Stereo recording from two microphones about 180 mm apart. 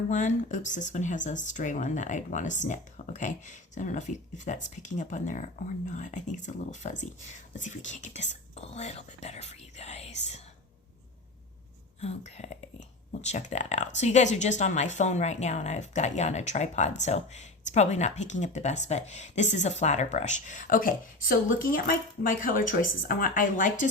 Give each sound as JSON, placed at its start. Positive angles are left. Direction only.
{"t": 0.1, "sound": "speech", "side_deg": 45}
{"t": 11.9, "sound": "speech", "side_deg": 35}